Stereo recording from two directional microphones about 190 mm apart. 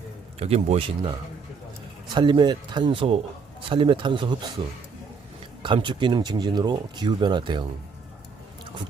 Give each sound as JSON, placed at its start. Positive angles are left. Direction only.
{"t": 0.3, "sound": "speech", "side_deg": -30}
{"t": 2.1, "sound": "speech", "side_deg": -25}
{"t": 5.6, "sound": "speech", "side_deg": -25}